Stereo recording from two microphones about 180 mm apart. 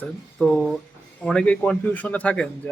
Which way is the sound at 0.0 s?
5° left (ahead or behind).